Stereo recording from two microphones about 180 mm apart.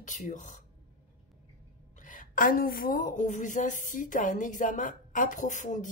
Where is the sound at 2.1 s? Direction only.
45° left (ahead or behind).